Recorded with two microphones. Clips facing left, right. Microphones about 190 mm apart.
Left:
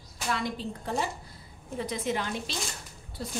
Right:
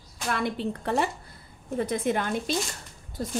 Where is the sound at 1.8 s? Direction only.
50° right (ahead or behind).